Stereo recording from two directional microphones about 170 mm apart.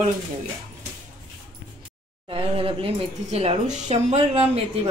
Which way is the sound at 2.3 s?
35° right (ahead or behind).